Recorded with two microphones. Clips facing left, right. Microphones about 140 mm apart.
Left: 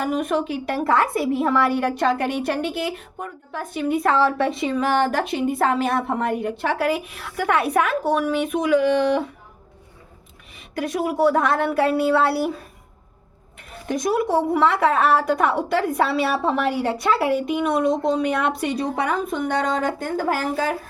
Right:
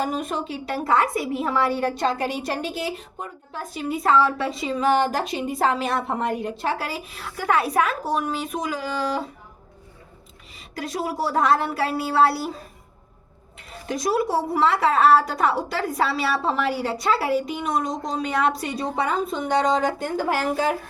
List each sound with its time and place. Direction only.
0.0 s a woman's voice: 65° left (ahead or behind)
10.6 s a woman's voice: 60° left (ahead or behind)
13.8 s a woman's voice: 55° left (ahead or behind)